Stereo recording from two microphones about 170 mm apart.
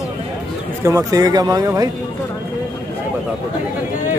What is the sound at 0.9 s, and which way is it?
Speech, 20° right (ahead or behind).